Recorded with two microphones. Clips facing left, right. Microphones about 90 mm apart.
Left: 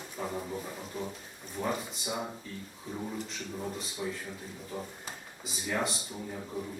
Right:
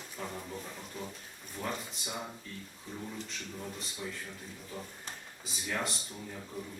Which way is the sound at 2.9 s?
20° left (ahead or behind).